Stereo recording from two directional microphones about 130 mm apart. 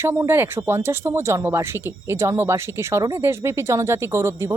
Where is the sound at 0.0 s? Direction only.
20° right (ahead or behind).